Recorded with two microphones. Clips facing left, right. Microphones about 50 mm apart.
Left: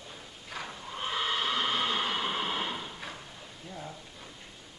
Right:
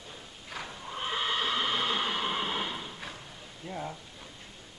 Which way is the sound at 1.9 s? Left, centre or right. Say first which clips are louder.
Even; centre.